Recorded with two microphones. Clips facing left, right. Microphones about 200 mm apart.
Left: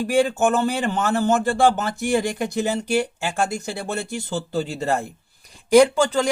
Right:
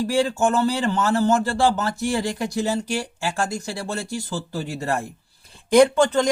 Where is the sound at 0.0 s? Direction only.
20° left (ahead or behind).